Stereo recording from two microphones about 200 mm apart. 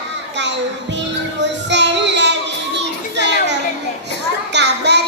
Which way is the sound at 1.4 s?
60° right (ahead or behind).